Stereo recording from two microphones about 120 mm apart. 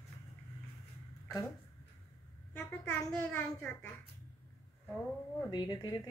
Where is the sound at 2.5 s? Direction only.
10° left (ahead or behind).